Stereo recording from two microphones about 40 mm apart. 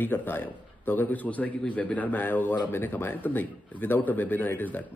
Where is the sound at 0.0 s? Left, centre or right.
Left.